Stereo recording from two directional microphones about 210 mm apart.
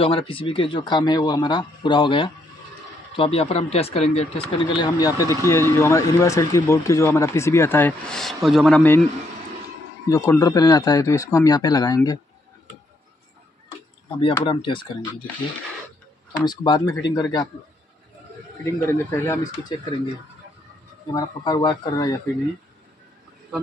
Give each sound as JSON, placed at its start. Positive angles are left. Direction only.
{"t": 0.0, "sound": "speech", "side_deg": 25}
{"t": 10.0, "sound": "speech", "side_deg": 15}
{"t": 14.2, "sound": "speech", "side_deg": 25}
{"t": 16.4, "sound": "speech", "side_deg": 20}
{"t": 18.7, "sound": "speech", "side_deg": 15}
{"t": 21.1, "sound": "speech", "side_deg": 20}